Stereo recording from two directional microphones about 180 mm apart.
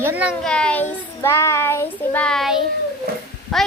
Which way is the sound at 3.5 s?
Centre (ahead or behind).